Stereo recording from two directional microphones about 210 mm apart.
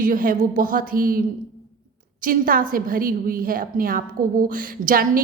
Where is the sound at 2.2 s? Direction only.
40° right (ahead or behind).